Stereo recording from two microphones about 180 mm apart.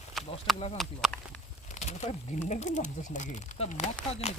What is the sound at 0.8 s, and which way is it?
Speech, centre (ahead or behind).